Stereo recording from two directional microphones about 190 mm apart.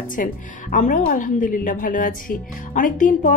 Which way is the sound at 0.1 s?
45° left (ahead or behind).